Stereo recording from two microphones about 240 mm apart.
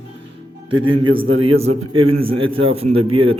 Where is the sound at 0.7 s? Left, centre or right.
Right.